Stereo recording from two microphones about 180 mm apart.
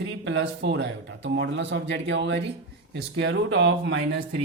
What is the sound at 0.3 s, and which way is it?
Speech, 90° right.